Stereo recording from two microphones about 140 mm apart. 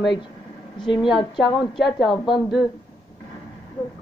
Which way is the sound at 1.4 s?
Centre (ahead or behind).